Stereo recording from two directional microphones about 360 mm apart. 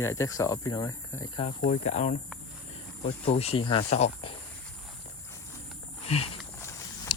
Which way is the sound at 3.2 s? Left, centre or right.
Centre.